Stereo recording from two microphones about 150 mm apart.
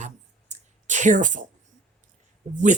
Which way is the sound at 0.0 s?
50° right (ahead or behind).